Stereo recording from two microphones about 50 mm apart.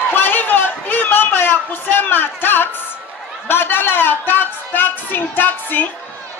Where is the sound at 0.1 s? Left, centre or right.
Left.